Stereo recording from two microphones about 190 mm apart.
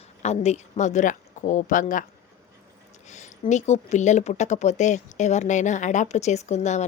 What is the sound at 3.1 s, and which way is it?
A woman's voice, 40° left (ahead or behind).